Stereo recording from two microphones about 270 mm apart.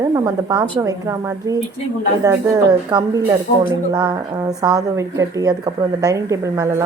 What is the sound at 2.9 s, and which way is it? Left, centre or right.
A woman's voice, centre.